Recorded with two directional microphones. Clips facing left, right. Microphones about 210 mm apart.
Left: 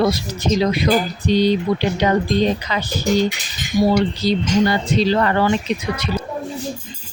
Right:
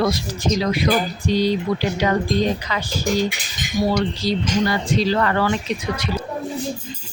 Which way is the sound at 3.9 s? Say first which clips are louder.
Left 2 dB; 15° left (ahead or behind).